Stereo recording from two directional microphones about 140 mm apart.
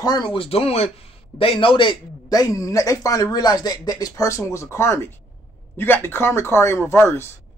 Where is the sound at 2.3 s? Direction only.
25° left (ahead or behind).